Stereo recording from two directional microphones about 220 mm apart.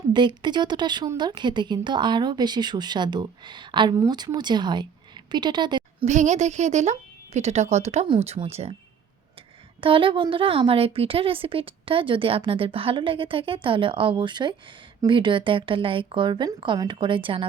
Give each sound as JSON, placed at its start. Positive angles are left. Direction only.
{"t": 0.1, "sound": "a woman's voice", "side_deg": -20}
{"t": 6.1, "sound": "a woman's voice", "side_deg": -35}
{"t": 9.8, "sound": "a woman's voice", "side_deg": -25}